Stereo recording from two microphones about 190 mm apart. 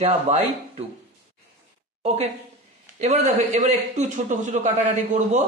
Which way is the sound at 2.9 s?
35° right (ahead or behind).